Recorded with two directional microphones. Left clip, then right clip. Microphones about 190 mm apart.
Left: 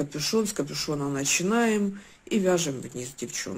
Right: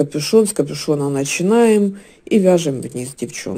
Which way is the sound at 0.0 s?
35° right (ahead or behind).